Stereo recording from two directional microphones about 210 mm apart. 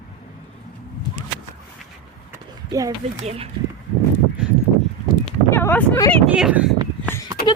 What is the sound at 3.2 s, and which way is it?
Speech, 30° right (ahead or behind).